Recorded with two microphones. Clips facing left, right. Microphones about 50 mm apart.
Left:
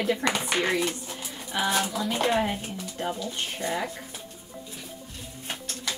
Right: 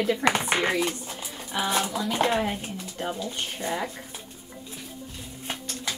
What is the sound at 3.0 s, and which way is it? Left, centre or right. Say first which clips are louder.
Speech: even; centre.